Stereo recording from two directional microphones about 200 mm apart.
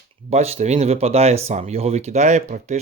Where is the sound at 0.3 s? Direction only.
30° right (ahead or behind).